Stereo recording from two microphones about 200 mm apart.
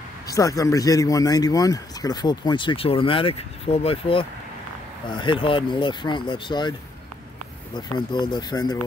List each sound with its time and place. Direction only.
0.3 s speech: 15° left (ahead or behind)
7.7 s speech: 20° left (ahead or behind)